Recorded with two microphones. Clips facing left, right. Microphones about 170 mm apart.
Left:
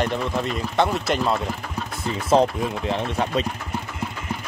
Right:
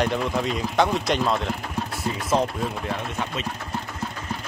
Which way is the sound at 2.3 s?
35° left (ahead or behind).